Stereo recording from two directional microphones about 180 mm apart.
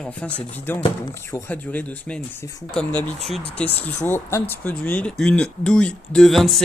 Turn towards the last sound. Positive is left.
turn(degrees=0)  # may be behind; listen again after turning